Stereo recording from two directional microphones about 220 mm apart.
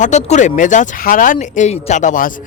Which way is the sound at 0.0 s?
30° left (ahead or behind).